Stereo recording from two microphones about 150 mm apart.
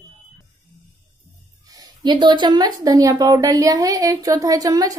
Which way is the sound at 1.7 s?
25° right (ahead or behind).